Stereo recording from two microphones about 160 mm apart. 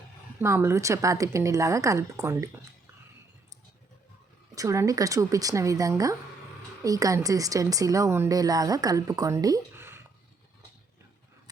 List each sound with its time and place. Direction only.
0.3 s speech: 15° right (ahead or behind)
4.5 s speech: 20° right (ahead or behind)